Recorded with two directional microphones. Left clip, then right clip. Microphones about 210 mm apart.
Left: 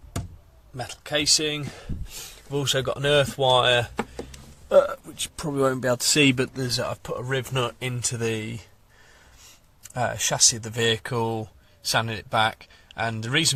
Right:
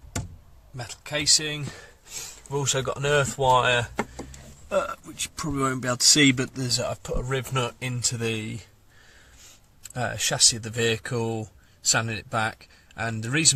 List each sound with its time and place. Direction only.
0.8 s speech: 20° left (ahead or behind)
2.0 s speech: centre (ahead or behind)
2.5 s speech: 10° left (ahead or behind)
9.9 s speech: 5° left (ahead or behind)